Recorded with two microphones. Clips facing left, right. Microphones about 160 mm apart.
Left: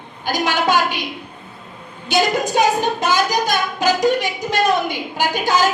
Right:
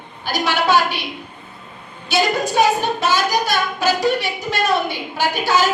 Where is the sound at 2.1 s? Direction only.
15° left (ahead or behind).